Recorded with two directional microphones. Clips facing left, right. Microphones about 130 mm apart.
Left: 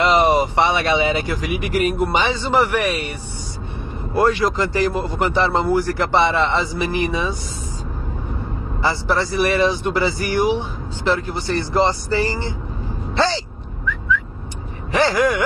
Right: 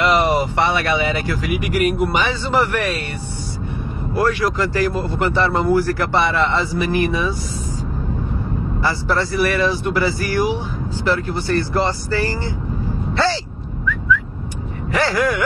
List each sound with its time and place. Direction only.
0.0 s a man's voice: 20° left (ahead or behind)
8.8 s a man's voice: 15° left (ahead or behind)
14.9 s a man's voice: 20° left (ahead or behind)